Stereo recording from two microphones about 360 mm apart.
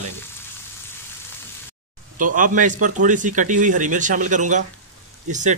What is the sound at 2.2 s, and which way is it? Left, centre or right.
A man's voice, right.